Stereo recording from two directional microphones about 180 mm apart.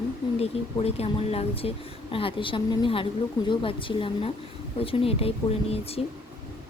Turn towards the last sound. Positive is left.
turn(degrees=35)  # may be behind; listen again after turning